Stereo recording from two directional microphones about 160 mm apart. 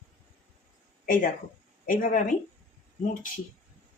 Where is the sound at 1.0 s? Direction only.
55° left (ahead or behind).